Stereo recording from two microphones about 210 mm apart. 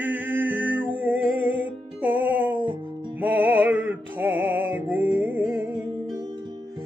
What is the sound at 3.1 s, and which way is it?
Music, 10° right (ahead or behind).